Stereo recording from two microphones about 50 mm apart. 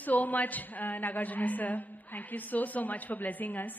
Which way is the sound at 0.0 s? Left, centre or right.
Left.